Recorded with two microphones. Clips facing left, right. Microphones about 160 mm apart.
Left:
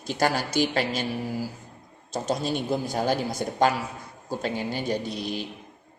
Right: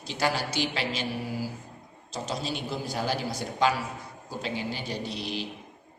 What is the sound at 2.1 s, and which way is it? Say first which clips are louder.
Speech: left 6 dB; 50° left (ahead or behind).